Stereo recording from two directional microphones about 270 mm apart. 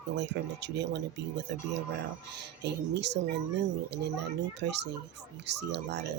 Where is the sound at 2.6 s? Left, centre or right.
Right.